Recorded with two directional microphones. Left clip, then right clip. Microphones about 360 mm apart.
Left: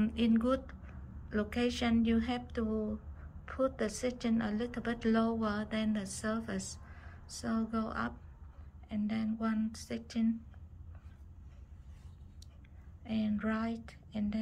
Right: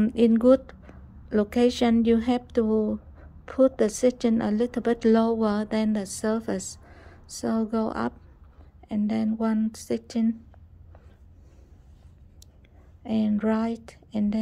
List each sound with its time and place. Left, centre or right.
0.0 s a woman's voice: centre
13.0 s speech: centre